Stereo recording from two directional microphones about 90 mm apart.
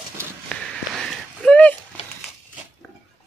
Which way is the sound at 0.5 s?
5° left (ahead or behind).